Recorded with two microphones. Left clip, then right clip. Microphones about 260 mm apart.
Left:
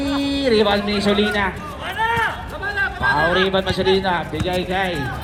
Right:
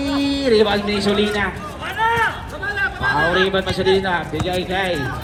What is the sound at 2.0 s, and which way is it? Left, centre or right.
Run, left.